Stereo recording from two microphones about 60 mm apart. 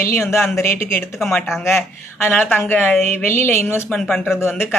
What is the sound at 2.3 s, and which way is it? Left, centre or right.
A woman's voice, left.